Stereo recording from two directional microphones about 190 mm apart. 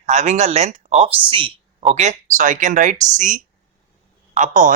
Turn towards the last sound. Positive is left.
turn(degrees=-40)  # may be behind; listen again after turning